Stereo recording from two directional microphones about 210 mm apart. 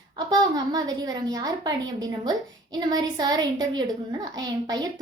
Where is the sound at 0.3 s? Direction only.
20° right (ahead or behind).